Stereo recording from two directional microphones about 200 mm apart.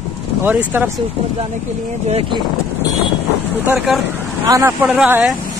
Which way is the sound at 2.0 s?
30° right (ahead or behind).